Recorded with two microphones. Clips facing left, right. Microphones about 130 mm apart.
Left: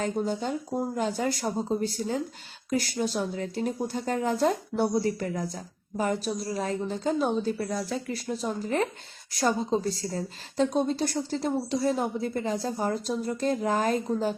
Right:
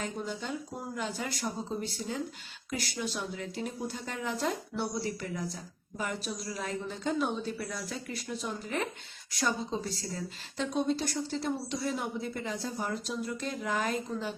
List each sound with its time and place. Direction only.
0.0 s speech: 40° left (ahead or behind)